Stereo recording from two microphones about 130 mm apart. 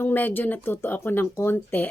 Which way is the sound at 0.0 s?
15° left (ahead or behind).